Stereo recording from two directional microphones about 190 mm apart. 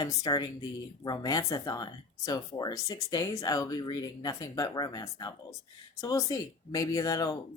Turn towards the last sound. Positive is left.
turn(degrees=20)  # may be behind; listen again after turning